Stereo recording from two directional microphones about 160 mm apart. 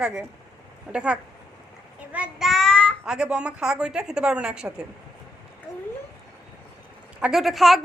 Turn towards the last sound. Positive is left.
turn(degrees=0)  # may be behind; listen again after turning